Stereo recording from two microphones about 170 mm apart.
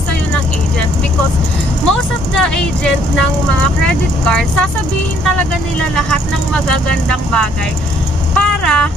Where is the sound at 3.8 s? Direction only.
5° left (ahead or behind).